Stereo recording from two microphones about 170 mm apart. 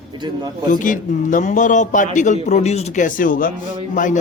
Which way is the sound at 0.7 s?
50° left (ahead or behind).